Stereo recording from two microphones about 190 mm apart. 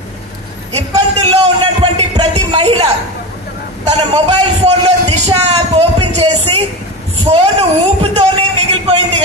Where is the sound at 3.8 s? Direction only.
30° right (ahead or behind).